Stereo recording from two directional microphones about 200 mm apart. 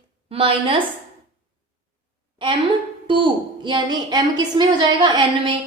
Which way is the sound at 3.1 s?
25° right (ahead or behind).